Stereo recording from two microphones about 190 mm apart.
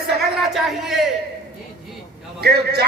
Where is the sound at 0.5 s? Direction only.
Centre (ahead or behind).